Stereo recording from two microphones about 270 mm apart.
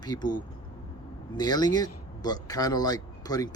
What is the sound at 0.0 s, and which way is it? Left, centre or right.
Speech, centre.